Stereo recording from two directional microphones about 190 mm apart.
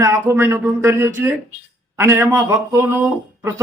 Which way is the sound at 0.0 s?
15° right (ahead or behind).